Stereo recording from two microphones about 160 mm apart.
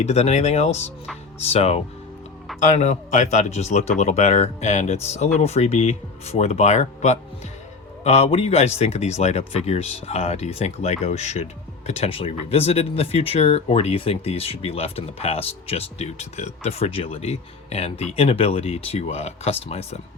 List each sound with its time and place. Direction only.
0.0 s speech: 40° left (ahead or behind)